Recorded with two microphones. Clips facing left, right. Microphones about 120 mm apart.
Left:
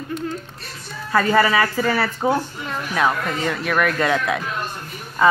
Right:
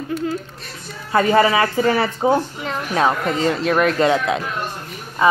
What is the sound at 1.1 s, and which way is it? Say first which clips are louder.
A woman's voice: right 2 dB; 20° right (ahead or behind).